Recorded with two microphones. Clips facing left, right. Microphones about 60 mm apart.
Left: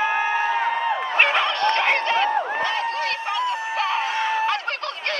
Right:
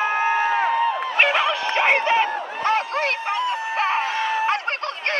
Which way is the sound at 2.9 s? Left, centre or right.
Right.